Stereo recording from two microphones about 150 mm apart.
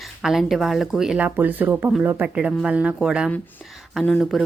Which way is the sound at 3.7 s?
Centre (ahead or behind).